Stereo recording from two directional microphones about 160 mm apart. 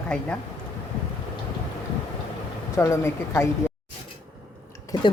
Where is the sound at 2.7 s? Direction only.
20° left (ahead or behind).